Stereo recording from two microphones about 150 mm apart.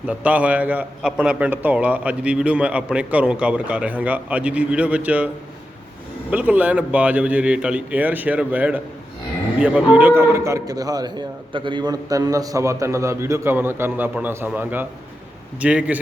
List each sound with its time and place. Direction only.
0.1 s a man's voice: 10° right (ahead or behind)
6.3 s a man's voice: 10° right (ahead or behind)